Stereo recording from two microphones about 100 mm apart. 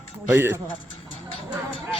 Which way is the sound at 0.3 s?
25° right (ahead or behind).